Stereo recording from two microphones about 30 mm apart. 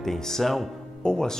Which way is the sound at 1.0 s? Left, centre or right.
Centre.